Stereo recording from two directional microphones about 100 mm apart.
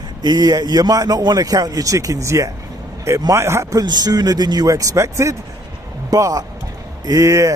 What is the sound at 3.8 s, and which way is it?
A man's voice, 45° right (ahead or behind).